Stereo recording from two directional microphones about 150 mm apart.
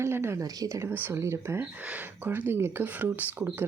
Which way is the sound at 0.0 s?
15° right (ahead or behind).